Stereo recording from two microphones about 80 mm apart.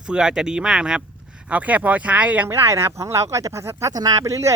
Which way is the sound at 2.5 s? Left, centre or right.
Right.